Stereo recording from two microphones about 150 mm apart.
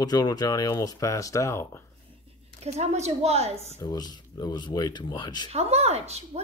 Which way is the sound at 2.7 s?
45° right (ahead or behind).